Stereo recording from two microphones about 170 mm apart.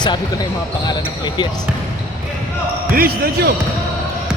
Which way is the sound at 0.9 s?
25° left (ahead or behind).